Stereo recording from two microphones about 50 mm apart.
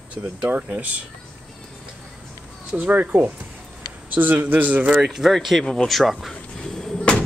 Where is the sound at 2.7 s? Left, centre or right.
Right.